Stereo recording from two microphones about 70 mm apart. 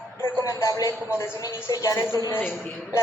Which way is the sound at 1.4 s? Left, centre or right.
Left.